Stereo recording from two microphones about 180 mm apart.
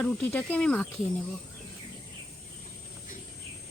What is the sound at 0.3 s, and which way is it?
Speech, 10° left (ahead or behind).